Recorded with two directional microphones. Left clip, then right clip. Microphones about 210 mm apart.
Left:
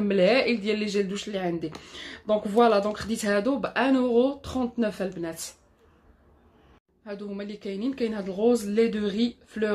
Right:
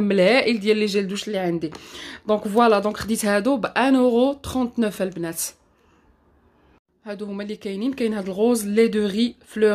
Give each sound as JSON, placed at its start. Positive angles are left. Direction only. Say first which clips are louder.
{"t": 0.0, "sound": "speech", "louder": "right 4 dB", "side_deg": -50}
{"t": 7.1, "sound": "speech", "louder": "right 5 dB", "side_deg": -50}